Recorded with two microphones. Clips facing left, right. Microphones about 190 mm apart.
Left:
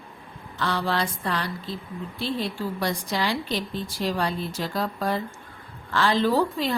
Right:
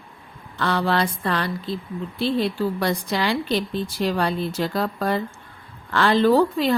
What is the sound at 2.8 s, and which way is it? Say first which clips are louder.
Speech: right 3 dB; 65° right (ahead or behind).